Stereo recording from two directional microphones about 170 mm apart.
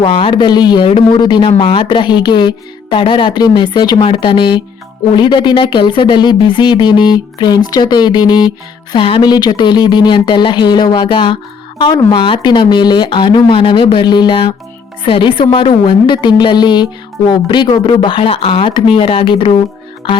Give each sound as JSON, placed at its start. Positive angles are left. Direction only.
{"t": 0.0, "sound": "speech", "side_deg": 30}